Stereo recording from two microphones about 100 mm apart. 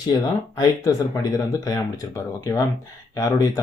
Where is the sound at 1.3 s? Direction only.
35° left (ahead or behind).